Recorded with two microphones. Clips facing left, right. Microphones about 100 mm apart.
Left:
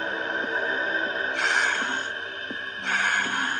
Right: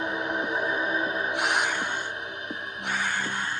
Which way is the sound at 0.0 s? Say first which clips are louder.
Right 1 dB; 10° right (ahead or behind).